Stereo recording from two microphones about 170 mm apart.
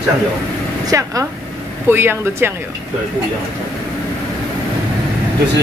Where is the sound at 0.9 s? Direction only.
20° right (ahead or behind).